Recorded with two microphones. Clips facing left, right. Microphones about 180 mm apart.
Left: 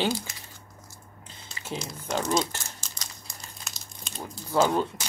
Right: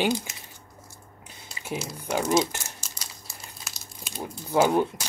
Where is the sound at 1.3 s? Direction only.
15° right (ahead or behind).